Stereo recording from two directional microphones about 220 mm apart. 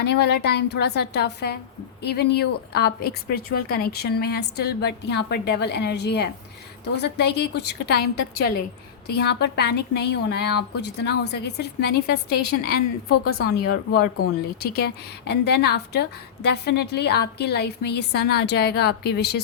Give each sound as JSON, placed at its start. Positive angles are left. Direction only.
{"t": 0.0, "sound": "a woman's voice", "side_deg": 50}